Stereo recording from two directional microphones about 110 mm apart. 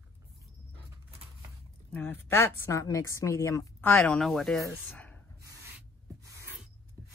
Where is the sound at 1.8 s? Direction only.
15° left (ahead or behind).